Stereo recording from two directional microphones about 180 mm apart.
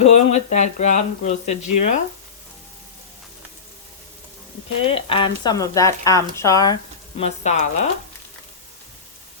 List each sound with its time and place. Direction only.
0.0 s speech: 40° left (ahead or behind)
4.9 s speech: 30° left (ahead or behind)
7.2 s speech: 40° left (ahead or behind)